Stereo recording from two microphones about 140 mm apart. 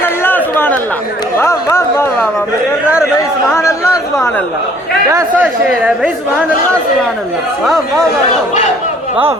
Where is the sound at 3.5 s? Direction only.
20° left (ahead or behind).